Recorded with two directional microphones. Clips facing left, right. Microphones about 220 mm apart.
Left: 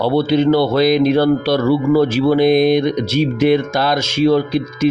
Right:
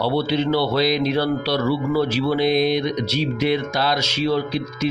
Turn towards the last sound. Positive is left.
turn(degrees=50)  # may be behind; listen again after turning